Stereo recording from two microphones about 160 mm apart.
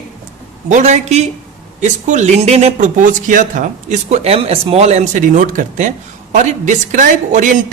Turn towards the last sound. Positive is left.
turn(degrees=-55)  # may be behind; listen again after turning